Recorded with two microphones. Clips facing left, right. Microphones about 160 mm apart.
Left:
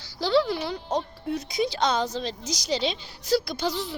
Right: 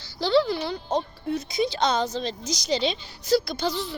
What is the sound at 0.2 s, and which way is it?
A woman's voice, 5° left (ahead or behind).